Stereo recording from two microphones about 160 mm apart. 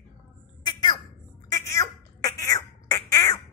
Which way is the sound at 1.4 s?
20° left (ahead or behind).